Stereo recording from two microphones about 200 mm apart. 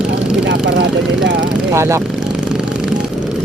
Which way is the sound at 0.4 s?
60° right (ahead or behind).